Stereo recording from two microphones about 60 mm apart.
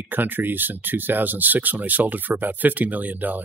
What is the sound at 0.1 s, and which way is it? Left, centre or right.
Speech, right.